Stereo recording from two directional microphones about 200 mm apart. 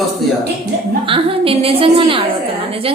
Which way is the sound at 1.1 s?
30° right (ahead or behind).